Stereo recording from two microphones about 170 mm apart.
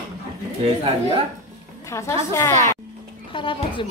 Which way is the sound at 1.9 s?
15° left (ahead or behind).